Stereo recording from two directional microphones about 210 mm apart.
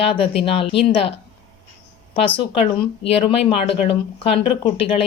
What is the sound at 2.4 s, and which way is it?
A woman's voice, 25° left (ahead or behind).